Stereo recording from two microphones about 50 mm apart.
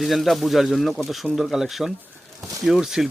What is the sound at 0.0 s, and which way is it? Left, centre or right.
Speech, centre.